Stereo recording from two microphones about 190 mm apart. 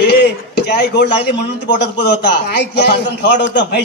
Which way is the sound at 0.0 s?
60° left (ahead or behind).